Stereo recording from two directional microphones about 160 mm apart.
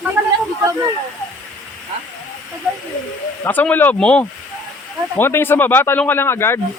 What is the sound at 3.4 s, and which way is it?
Speech, 10° left (ahead or behind).